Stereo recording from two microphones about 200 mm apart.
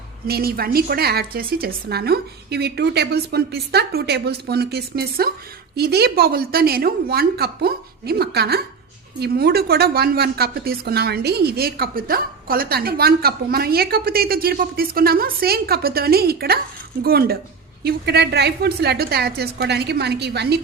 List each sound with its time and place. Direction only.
0.3 s a woman's voice: 50° right (ahead or behind)